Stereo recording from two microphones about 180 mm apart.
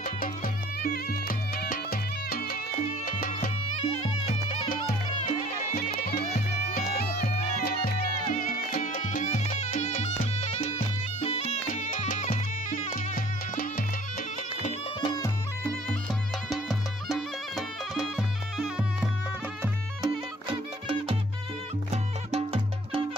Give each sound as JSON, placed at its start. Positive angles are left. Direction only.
{"t": 0.0, "sound": "music", "side_deg": 50}
{"t": 5.2, "sound": "music", "side_deg": 45}
{"t": 6.2, "sound": "music", "side_deg": 40}
{"t": 6.9, "sound": "music", "side_deg": 55}
{"t": 15.0, "sound": "music", "side_deg": 25}
{"t": 16.4, "sound": "music", "side_deg": 0}
{"t": 20.0, "sound": "music", "side_deg": -30}